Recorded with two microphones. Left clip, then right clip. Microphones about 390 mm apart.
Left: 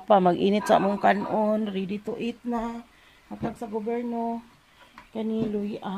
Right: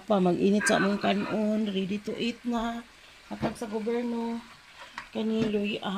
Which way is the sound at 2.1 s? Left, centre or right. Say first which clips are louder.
Left 1 dB; centre.